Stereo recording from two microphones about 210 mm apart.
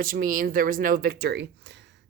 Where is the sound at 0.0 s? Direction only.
40° right (ahead or behind).